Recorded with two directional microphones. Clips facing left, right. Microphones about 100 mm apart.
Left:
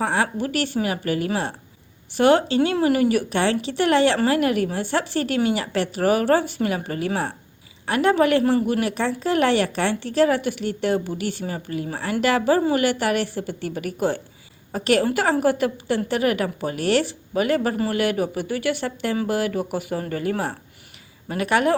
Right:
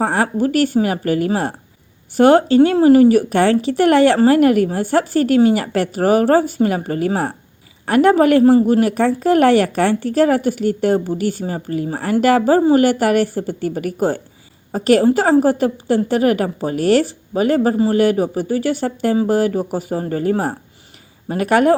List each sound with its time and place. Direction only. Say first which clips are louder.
0.0 s a woman's voice: right 6 dB; 45° right (ahead or behind)